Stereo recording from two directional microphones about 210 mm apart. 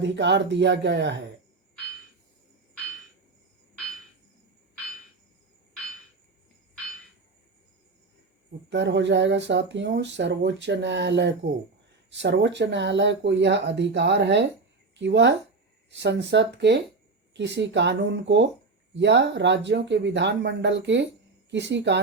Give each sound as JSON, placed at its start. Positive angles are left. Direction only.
{"t": 0.0, "sound": "speech", "side_deg": -55}
{"t": 8.7, "sound": "speech", "side_deg": -55}